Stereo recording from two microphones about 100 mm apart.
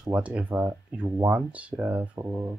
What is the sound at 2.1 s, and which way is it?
Speech, 30° right (ahead or behind).